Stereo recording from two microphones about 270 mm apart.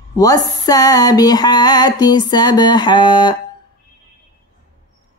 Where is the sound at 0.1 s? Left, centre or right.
Centre.